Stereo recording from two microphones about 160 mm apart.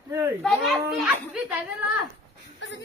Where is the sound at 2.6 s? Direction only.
90° left.